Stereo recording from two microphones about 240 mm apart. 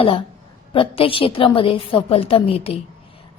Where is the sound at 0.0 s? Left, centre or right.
Left.